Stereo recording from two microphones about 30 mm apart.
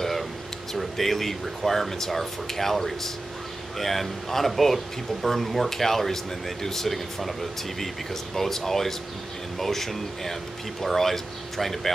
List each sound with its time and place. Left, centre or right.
0.7 s speech: centre